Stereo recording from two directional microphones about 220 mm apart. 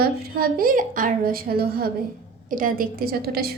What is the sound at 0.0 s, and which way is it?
A woman's voice, 45° right (ahead or behind).